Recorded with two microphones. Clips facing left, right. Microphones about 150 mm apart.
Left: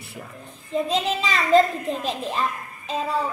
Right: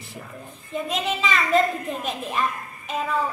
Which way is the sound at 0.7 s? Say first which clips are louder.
Left 3 dB; 30° left (ahead or behind).